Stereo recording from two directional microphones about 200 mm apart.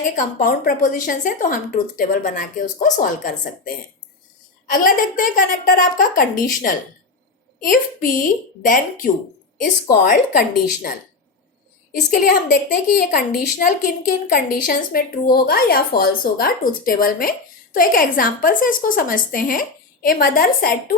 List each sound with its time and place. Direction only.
0.2 s a woman's voice: 45° left (ahead or behind)
11.9 s a woman's voice: 45° left (ahead or behind)